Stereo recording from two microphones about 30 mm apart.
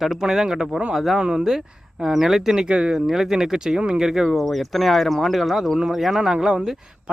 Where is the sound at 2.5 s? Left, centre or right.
Right.